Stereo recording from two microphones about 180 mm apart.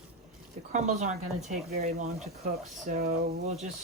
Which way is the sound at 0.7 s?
40° right (ahead or behind).